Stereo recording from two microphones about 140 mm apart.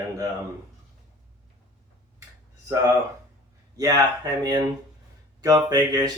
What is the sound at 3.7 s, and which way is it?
Speech, 25° right (ahead or behind).